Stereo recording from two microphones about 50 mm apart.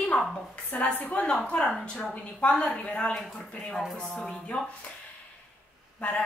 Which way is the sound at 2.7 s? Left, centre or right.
Left.